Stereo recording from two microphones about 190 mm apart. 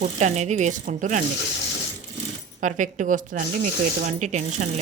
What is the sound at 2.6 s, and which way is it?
Speech, 40° right (ahead or behind).